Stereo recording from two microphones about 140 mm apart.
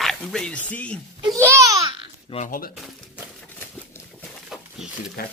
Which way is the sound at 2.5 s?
90° left.